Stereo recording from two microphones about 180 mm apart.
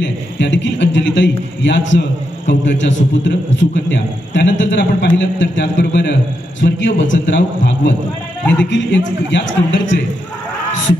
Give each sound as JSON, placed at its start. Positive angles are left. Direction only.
{"t": 0.0, "sound": "a man's voice", "side_deg": 80}
{"t": 6.6, "sound": "a man's voice", "side_deg": 85}